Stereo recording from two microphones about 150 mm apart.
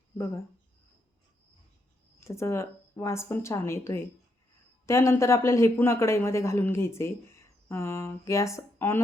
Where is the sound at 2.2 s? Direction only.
20° left (ahead or behind).